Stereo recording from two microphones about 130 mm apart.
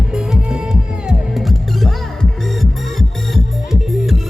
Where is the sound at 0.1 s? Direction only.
5° right (ahead or behind).